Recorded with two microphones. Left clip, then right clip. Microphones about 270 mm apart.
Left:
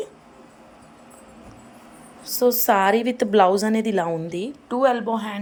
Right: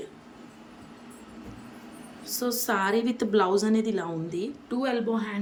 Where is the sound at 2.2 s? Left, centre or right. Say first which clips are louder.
Left 11 dB; centre.